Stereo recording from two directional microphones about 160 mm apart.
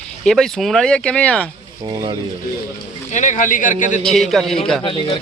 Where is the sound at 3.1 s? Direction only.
50° left (ahead or behind).